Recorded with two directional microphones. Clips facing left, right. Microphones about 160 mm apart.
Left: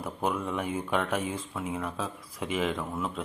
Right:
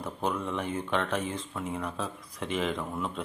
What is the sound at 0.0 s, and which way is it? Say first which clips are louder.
Speech: left 1 dB; 5° left (ahead or behind).